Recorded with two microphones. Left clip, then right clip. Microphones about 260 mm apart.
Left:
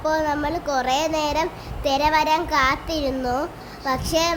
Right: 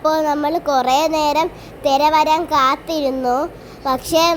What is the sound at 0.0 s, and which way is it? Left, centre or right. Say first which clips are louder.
A child's voice: right 5 dB; centre.